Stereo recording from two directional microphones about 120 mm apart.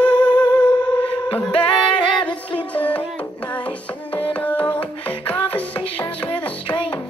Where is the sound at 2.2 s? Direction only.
10° left (ahead or behind).